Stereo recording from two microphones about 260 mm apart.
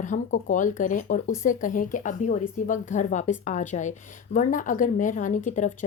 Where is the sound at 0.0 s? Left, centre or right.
Left.